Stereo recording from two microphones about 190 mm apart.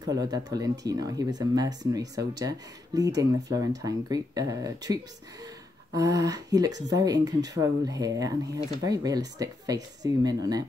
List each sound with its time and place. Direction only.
0.0 s speech: 20° right (ahead or behind)